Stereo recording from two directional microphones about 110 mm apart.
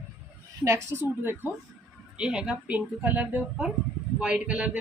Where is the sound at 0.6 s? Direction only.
25° right (ahead or behind).